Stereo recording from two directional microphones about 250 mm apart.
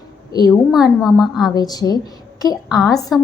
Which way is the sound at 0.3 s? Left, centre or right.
Centre.